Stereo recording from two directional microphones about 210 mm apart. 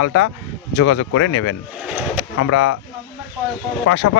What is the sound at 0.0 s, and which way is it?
Speech, 60° left (ahead or behind).